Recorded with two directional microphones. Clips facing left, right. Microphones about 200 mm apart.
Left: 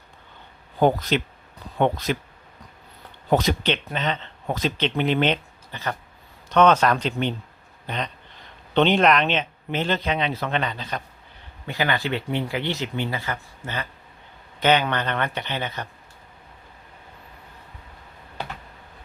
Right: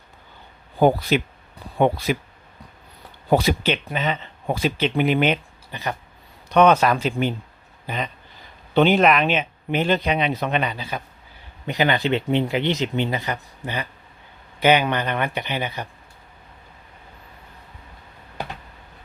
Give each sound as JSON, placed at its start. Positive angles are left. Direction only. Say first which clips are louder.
{"t": 0.8, "sound": "speech", "louder": "right 2 dB", "side_deg": -10}
{"t": 3.2, "sound": "speech", "louder": "right 2 dB", "side_deg": -10}
{"t": 11.6, "sound": "speech", "louder": "right 4 dB", "side_deg": -20}